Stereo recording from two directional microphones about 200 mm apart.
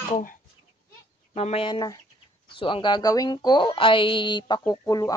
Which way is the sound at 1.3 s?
30° left (ahead or behind).